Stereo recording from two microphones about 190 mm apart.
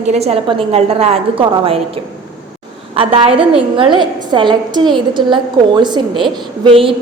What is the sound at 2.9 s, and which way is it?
A woman's voice, 30° right (ahead or behind).